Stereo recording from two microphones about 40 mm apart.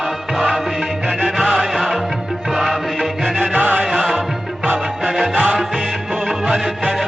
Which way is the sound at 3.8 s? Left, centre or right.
Centre.